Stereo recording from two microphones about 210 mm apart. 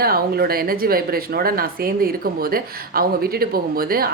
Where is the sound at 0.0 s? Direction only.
45° right (ahead or behind).